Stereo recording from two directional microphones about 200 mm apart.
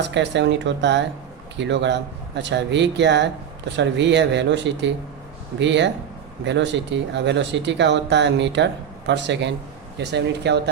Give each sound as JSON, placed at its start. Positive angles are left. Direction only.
{"t": 0.0, "sound": "speech", "side_deg": -60}